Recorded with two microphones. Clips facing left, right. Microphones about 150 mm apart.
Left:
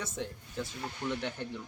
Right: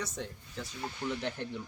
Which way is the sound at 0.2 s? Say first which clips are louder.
Left 2 dB; centre (ahead or behind).